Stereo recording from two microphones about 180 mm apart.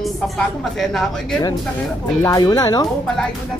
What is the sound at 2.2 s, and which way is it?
Speech, 20° left (ahead or behind).